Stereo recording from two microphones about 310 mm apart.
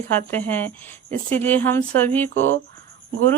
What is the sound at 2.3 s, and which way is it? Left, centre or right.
Speech, right.